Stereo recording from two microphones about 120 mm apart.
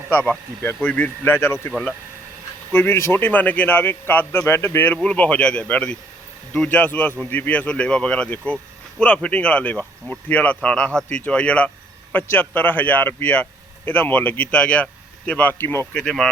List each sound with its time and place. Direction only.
0.1 s speech: 15° left (ahead or behind)
1.7 s speech: centre (ahead or behind)
2.7 s speech: 15° left (ahead or behind)
15.9 s speech: 5° left (ahead or behind)